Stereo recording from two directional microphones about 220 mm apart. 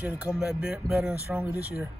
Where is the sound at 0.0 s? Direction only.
5° right (ahead or behind).